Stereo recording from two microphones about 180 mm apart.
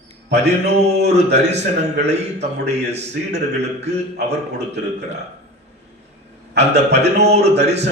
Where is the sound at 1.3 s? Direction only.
70° right (ahead or behind).